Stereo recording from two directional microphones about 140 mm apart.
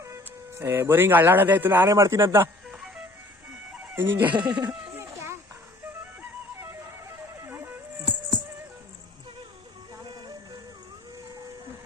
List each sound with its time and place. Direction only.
0.6 s speech: 15° right (ahead or behind)
2.6 s music: 5° right (ahead or behind)
3.8 s chicken: 15° right (ahead or behind)
4.3 s speech: 30° right (ahead or behind)
4.6 s children playing: 15° right (ahead or behind)
7.3 s music: 15° right (ahead or behind)